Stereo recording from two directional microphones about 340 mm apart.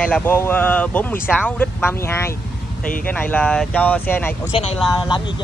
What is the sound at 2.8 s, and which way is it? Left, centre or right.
Speech, left.